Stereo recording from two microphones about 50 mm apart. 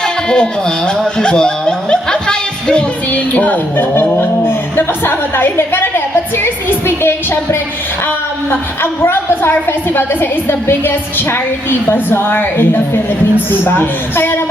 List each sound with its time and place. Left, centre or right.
0.0 s music: centre
3.1 s music: left
4.2 s a woman's voice: left
6.3 s music: left
8.4 s a woman's voice: left